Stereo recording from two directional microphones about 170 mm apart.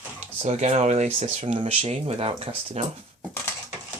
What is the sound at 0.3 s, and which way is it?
Speech, 40° right (ahead or behind).